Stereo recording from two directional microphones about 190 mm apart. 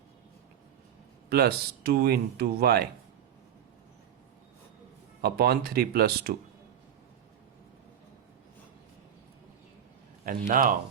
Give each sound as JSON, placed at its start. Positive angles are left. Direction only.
{"t": 1.3, "sound": "speech", "side_deg": -55}
{"t": 5.2, "sound": "speech", "side_deg": -55}
{"t": 10.2, "sound": "speech", "side_deg": -45}